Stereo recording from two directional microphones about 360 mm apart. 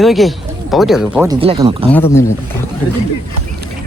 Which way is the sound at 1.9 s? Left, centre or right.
Centre.